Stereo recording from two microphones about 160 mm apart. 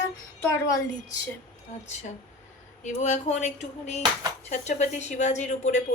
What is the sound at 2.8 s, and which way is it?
A woman's voice, 45° left (ahead or behind).